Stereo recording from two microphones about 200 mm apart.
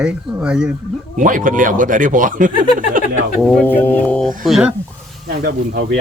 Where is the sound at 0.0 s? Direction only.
5° right (ahead or behind).